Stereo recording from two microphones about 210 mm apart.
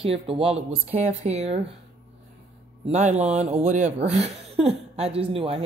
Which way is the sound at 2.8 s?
35° right (ahead or behind).